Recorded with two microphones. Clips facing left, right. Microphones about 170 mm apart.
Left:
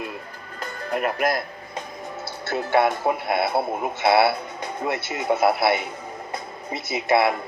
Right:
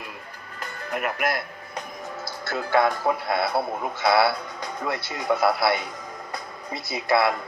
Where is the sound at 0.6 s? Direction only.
35° left (ahead or behind).